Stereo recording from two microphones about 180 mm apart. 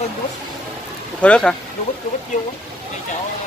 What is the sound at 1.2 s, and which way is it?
Speech, 5° left (ahead or behind).